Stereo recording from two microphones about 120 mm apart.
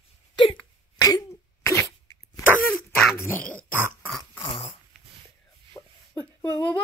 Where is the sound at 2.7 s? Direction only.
5° left (ahead or behind).